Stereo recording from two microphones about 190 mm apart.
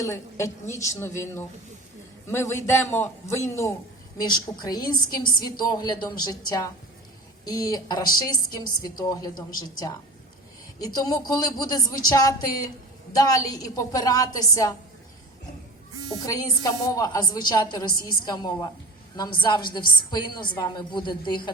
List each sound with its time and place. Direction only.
0.0 s a woman's voice: 15° left (ahead or behind)
16.2 s a woman's voice: 20° left (ahead or behind)